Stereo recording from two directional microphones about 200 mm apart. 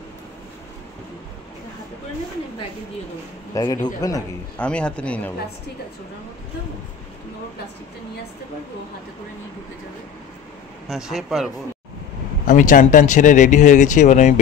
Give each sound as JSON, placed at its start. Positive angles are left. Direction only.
{"t": 3.5, "sound": "speech", "side_deg": 20}
{"t": 4.6, "sound": "a man's voice", "side_deg": 5}
{"t": 10.9, "sound": "a man's voice", "side_deg": 0}
{"t": 12.4, "sound": "speech", "side_deg": 40}